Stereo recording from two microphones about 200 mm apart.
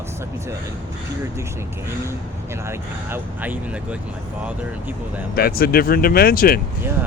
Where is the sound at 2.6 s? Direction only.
10° right (ahead or behind).